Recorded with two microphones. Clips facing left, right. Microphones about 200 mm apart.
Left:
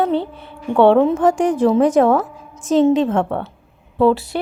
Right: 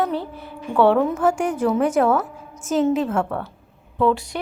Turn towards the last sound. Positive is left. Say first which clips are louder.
# left 5 dB
turn(degrees=30)  # may be behind; listen again after turning